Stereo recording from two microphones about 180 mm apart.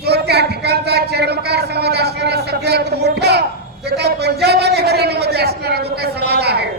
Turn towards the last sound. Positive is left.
turn(degrees=-65)  # may be behind; listen again after turning